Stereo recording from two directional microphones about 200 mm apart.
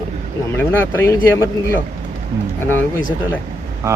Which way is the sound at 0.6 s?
10° left (ahead or behind).